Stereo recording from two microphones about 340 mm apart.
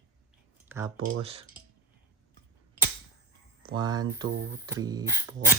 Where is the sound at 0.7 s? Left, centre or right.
Centre.